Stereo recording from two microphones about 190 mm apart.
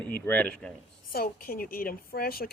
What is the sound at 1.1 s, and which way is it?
A man's voice, 50° left (ahead or behind).